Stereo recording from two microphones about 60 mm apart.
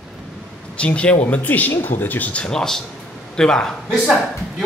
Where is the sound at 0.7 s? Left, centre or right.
Centre.